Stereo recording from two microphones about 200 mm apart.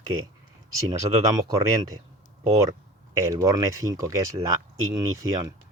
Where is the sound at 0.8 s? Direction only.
20° right (ahead or behind).